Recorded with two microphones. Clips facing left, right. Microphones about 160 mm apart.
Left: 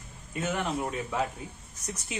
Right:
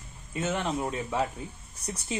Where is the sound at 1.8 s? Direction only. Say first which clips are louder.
Right 3 dB; 30° right (ahead or behind).